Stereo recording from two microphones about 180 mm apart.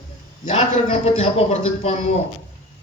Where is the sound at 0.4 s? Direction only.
35° left (ahead or behind).